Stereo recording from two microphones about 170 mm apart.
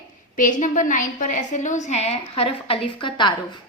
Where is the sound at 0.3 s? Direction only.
50° left (ahead or behind).